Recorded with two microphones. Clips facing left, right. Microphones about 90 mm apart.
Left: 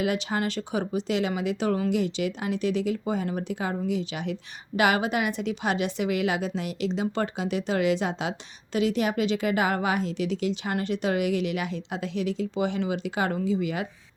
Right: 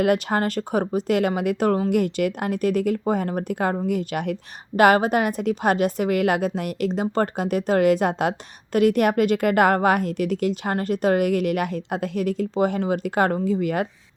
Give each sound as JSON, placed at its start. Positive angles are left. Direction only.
{"t": 0.0, "sound": "a woman's voice", "side_deg": -50}